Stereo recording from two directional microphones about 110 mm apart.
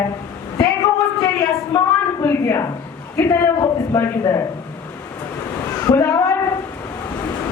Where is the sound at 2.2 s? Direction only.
25° left (ahead or behind).